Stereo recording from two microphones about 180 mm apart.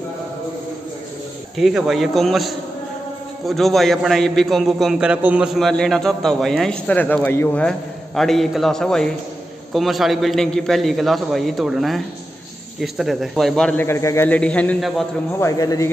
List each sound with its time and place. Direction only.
1.6 s a man's voice: centre (ahead or behind)
15.4 s speech: 20° left (ahead or behind)